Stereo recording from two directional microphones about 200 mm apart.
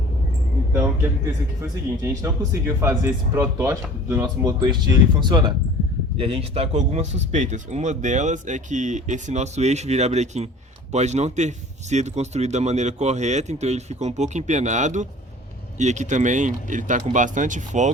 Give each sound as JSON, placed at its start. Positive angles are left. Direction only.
{"t": 0.7, "sound": "a man's voice", "side_deg": -10}
{"t": 2.2, "sound": "speech", "side_deg": -15}